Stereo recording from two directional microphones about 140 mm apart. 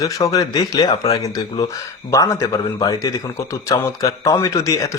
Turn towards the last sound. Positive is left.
turn(degrees=25)  # may be behind; listen again after turning